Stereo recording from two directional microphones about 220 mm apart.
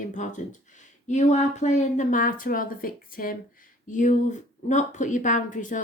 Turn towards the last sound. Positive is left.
turn(degrees=35)  # may be behind; listen again after turning